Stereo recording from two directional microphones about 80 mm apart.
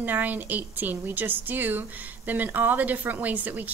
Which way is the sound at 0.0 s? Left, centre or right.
Right.